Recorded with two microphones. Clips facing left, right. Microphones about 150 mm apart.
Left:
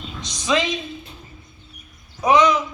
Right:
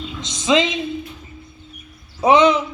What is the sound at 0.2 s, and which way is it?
Speech, 20° right (ahead or behind).